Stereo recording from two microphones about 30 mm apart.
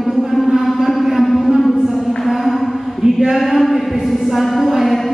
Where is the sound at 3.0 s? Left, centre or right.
Centre.